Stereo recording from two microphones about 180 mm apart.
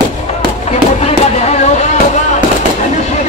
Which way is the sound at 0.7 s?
35° left (ahead or behind).